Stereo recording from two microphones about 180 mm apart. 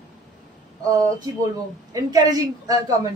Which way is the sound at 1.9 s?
20° right (ahead or behind).